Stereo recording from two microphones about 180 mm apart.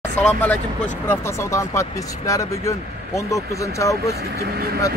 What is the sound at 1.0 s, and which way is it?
Speech, 15° left (ahead or behind).